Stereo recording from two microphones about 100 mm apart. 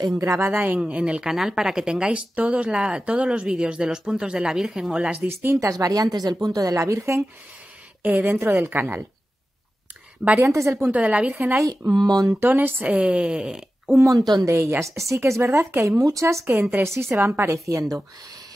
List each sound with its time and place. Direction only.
0.0 s speech: 35° right (ahead or behind)
0.5 s a woman's voice: 20° right (ahead or behind)
5.3 s a woman's voice: 25° right (ahead or behind)
10.4 s speech: 30° right (ahead or behind)
10.8 s a woman's voice: 15° right (ahead or behind)
11.9 s speech: 45° right (ahead or behind)
12.3 s a woman's voice: 20° right (ahead or behind)
14.0 s speech: 40° right (ahead or behind)
14.4 s a woman's voice: 25° right (ahead or behind)